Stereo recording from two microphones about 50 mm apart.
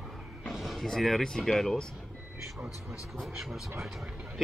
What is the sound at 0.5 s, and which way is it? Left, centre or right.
Music, centre.